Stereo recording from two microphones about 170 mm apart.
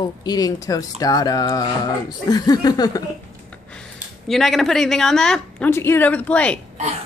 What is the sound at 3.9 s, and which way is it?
A woman's voice, centre (ahead or behind).